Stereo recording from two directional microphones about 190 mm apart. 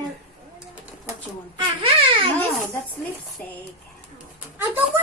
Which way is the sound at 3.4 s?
5° left (ahead or behind).